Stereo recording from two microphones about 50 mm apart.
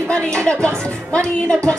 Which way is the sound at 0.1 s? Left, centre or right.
Centre.